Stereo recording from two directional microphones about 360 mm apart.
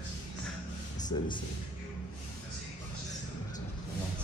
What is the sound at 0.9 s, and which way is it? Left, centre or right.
Speech, centre.